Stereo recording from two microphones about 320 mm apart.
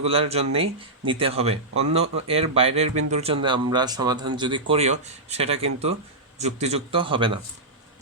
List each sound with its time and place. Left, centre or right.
0.0 s speech: centre